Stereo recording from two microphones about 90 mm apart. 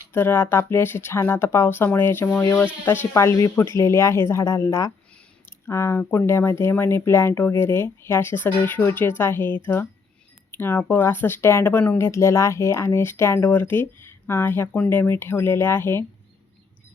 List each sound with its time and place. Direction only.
0.1 s speech: 25° left (ahead or behind)
5.5 s a sound: 30° left (ahead or behind)
6.0 s speech: 30° left (ahead or behind)